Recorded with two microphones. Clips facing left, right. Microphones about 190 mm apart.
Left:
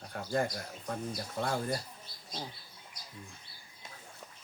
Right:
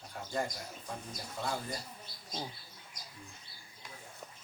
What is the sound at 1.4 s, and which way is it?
Speech, 55° left (ahead or behind).